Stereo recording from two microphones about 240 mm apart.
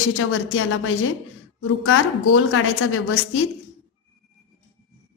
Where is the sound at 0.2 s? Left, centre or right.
Left.